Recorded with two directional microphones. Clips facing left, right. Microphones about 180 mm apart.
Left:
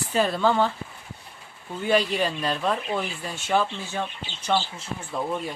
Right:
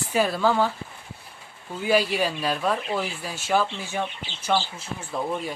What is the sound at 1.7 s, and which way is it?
Speech, 5° right (ahead or behind).